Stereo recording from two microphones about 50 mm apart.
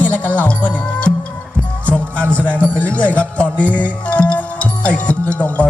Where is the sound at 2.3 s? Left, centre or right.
Left.